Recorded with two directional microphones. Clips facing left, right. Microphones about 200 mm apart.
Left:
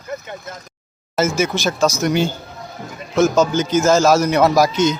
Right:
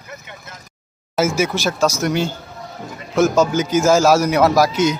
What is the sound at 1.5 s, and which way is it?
Speech, 5° right (ahead or behind).